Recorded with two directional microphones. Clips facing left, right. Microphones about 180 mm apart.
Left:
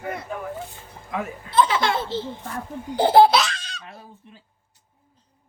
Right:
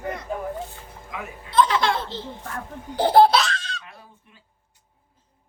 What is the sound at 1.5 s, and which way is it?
Speech, 5° left (ahead or behind).